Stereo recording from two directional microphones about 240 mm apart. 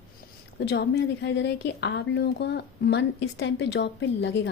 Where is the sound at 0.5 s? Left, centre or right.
Left.